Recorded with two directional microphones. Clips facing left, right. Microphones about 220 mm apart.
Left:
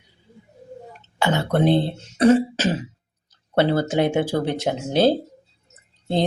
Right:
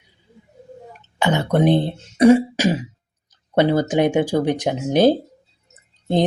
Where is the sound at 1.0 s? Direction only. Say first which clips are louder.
Right 2 dB; 15° right (ahead or behind).